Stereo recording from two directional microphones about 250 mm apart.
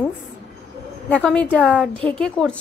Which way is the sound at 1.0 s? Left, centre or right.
Centre.